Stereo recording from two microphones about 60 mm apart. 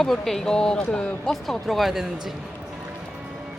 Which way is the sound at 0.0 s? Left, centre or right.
Centre.